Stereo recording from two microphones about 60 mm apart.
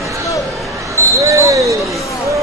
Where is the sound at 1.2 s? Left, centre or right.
Right.